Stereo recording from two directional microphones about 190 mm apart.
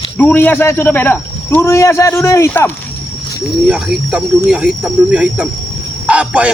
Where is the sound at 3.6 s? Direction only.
5° right (ahead or behind).